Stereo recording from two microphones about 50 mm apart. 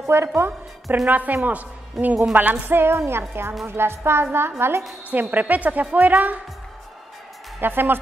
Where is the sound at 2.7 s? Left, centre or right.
Right.